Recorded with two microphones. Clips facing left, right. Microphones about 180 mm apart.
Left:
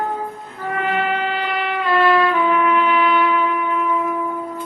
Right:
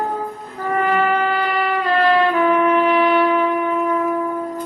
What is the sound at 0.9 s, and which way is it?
Train, 40° right (ahead or behind).